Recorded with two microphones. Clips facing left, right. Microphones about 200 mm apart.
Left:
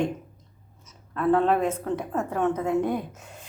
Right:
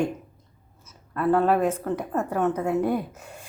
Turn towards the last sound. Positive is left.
turn(degrees=-10)  # may be behind; listen again after turning